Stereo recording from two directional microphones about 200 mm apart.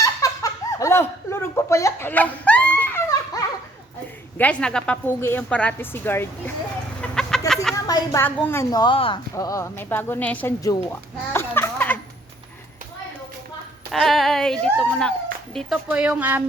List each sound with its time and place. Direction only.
0.0 s laughter: 15° left (ahead or behind)
4.4 s speech: 5° left (ahead or behind)
7.0 s chicken: centre (ahead or behind)
7.9 s a woman's voice: 15° left (ahead or behind)
13.9 s speech: centre (ahead or behind)